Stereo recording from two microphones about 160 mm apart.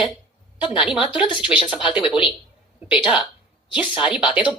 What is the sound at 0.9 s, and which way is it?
Speech, 5° right (ahead or behind).